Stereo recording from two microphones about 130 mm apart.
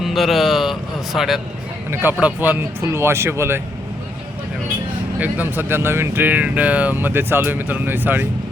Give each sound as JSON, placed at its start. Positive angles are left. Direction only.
{"t": 0.0, "sound": "a man's voice", "side_deg": 0}
{"t": 1.9, "sound": "speech", "side_deg": -15}
{"t": 5.2, "sound": "speech", "side_deg": -15}